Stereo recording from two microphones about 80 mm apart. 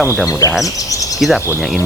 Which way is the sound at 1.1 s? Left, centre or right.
Centre.